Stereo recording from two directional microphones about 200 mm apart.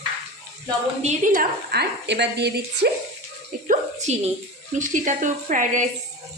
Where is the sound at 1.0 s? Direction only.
35° right (ahead or behind); by 2.9 s 55° right (ahead or behind).